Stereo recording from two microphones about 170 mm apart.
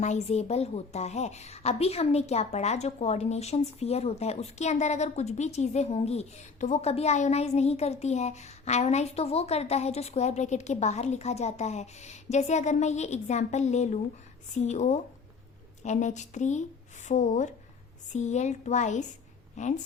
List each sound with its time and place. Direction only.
0.0 s a woman's voice: 40° left (ahead or behind)